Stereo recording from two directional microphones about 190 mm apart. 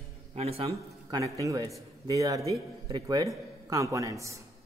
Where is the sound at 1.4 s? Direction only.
15° right (ahead or behind).